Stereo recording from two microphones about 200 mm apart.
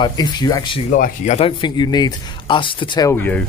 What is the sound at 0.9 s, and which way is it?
A man's voice, 40° left (ahead or behind).